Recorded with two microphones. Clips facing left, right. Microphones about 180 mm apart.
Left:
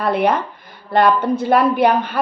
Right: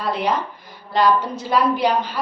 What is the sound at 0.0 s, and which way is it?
A woman's voice, 55° left (ahead or behind).